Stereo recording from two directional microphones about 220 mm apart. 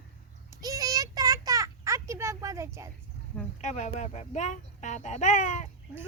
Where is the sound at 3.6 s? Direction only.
30° left (ahead or behind).